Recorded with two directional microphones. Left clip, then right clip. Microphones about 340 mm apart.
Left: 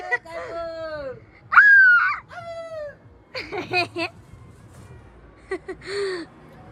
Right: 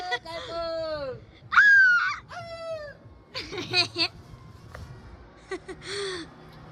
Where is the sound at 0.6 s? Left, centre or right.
Right.